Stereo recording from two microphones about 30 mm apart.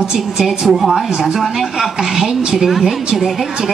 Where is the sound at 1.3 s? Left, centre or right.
Centre.